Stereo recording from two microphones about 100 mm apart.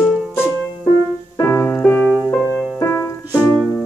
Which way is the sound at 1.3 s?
30° left (ahead or behind).